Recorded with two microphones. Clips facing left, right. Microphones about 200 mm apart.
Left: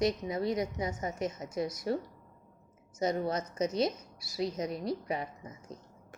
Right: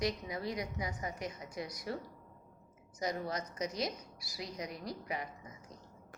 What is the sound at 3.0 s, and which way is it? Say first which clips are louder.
A woman's voice: left 6 dB; 25° left (ahead or behind).